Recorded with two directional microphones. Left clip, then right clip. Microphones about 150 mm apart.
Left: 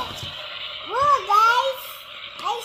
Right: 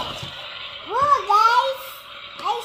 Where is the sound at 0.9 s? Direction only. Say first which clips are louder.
Right 1 dB; 10° left (ahead or behind).